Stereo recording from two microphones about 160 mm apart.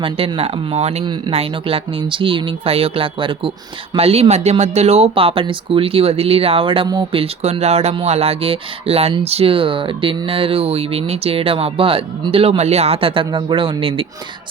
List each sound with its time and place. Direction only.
0.0 s speech: 35° right (ahead or behind)
1.0 s speech: 30° right (ahead or behind)